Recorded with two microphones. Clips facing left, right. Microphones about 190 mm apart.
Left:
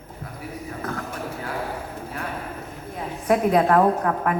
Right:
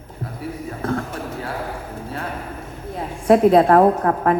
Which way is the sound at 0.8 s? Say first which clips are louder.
Right 9 dB; 25° right (ahead or behind).